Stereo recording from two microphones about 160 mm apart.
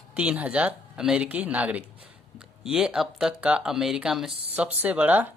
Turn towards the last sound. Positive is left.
turn(degrees=-10)  # may be behind; listen again after turning